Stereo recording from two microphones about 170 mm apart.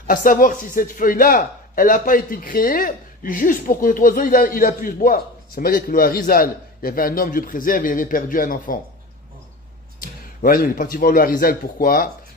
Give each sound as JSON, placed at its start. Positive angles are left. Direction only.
{"t": 0.0, "sound": "speech", "side_deg": 55}
{"t": 9.9, "sound": "a man's voice", "side_deg": 55}